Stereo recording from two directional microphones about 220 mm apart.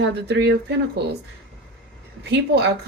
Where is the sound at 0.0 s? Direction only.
50° right (ahead or behind).